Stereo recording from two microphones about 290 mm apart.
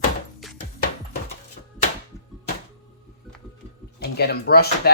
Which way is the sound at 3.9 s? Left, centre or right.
Left.